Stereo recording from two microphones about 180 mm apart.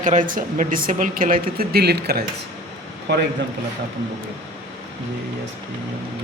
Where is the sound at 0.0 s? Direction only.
45° right (ahead or behind); by 2.2 s 65° right (ahead or behind).